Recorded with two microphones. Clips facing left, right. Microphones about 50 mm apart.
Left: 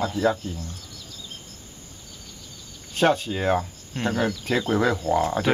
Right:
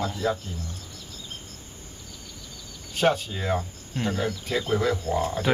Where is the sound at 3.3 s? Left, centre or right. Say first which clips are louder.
Left 5 dB; left.